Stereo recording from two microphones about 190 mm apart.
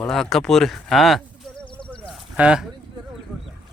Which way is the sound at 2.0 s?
5° right (ahead or behind).